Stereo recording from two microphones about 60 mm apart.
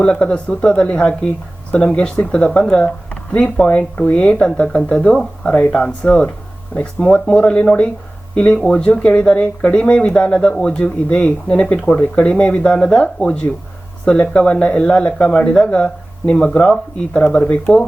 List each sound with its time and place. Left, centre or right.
0.0 s speech: centre
3.7 s speech: left